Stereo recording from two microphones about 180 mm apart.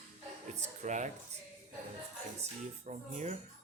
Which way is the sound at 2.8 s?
40° right (ahead or behind).